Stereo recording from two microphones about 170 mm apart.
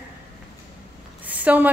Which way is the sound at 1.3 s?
10° right (ahead or behind).